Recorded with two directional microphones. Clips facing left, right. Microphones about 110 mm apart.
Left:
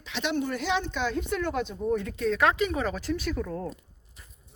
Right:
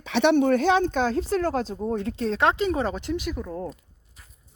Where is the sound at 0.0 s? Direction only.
65° right (ahead or behind).